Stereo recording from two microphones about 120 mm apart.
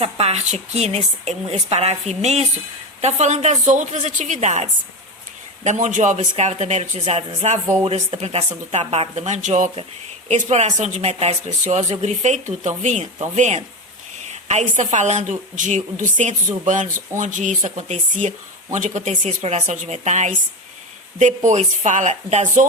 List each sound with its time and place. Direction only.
0.0 s speech: 60° right (ahead or behind)
5.6 s speech: 85° right
7.9 s speech: 55° right (ahead or behind); by 9.6 s 85° right
10.2 s speech: 70° right (ahead or behind)
14.3 s a sound: 70° right (ahead or behind)
14.8 s a woman's voice: 85° right; by 22.4 s 70° right (ahead or behind)